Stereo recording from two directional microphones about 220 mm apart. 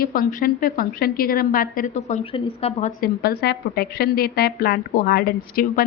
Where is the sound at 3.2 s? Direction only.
45° left (ahead or behind).